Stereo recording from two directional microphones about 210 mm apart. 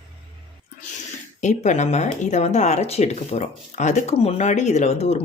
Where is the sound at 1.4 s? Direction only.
35° left (ahead or behind).